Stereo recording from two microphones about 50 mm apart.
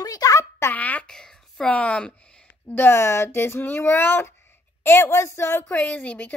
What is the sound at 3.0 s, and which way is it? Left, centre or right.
Speech, left.